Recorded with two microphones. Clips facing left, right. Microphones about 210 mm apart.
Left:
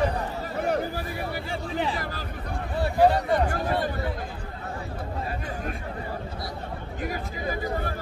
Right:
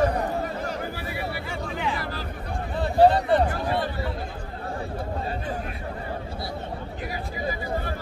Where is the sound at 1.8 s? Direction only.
40° left (ahead or behind).